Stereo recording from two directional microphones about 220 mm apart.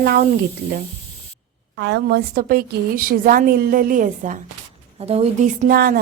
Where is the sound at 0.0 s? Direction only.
45° right (ahead or behind).